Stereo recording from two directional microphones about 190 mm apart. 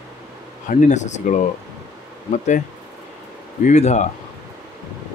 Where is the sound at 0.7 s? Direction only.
40° left (ahead or behind).